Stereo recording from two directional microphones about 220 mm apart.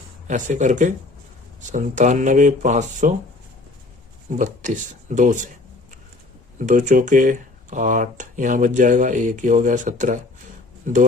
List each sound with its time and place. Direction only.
0.3 s speech: 35° right (ahead or behind)
4.3 s speech: 35° right (ahead or behind)
6.6 s speech: 35° right (ahead or behind)